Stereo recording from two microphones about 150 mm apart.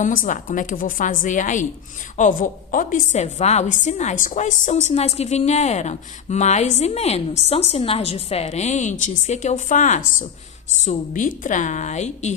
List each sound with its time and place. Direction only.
0.0 s a woman's voice: 60° left (ahead or behind)